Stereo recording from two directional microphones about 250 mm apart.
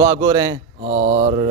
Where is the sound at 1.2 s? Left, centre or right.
Right.